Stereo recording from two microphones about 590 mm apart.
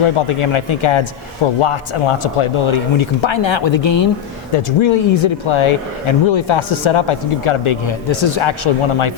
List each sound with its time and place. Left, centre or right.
0.0 s speech: left